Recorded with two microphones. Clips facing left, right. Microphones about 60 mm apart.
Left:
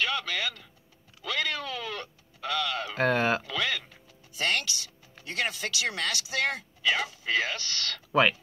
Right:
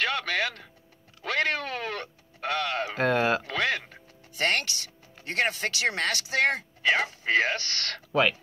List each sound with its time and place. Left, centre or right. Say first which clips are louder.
0.0 s speech: right 3 dB; right
1.2 s music: right 4 dB; right
3.0 s a sound: right 1 dB; centre
3.4 s quack: right 3 dB; right
3.8 s music: right 4 dB; right
5.2 s speech: right 4 dB; right
8.1 s speech: left 1 dB; centre